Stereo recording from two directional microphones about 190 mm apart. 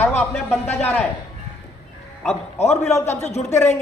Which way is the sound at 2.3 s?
35° left (ahead or behind).